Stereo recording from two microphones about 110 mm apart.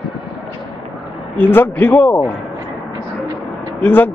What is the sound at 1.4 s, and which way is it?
Speech, 20° left (ahead or behind).